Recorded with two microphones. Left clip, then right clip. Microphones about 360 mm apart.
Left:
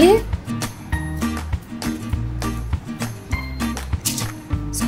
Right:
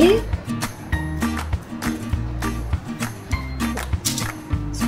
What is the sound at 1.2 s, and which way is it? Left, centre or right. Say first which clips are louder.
Music: right 1 dB; centre.